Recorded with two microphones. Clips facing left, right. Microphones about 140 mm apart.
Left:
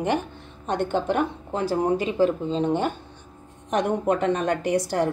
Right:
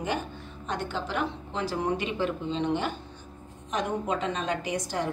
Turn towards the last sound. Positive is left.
turn(degrees=70)  # may be behind; listen again after turning